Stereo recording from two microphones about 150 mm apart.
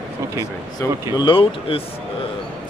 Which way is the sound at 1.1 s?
35° left (ahead or behind).